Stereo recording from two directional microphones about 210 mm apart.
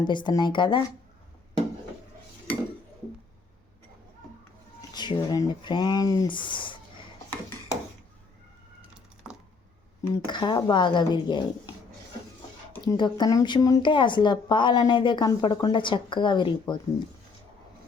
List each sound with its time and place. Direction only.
0.0 s a woman's voice: 20° left (ahead or behind)
4.9 s a woman's voice: 20° left (ahead or behind)
9.2 s a sound: 5° right (ahead or behind)
10.0 s a woman's voice: 20° left (ahead or behind)
12.8 s a woman's voice: 20° left (ahead or behind)